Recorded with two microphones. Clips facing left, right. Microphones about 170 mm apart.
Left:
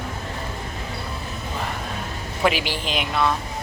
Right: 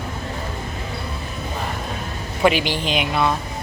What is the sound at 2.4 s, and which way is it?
Speech, centre (ahead or behind).